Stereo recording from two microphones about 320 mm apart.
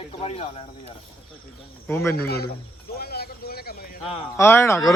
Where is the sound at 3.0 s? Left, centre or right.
Left.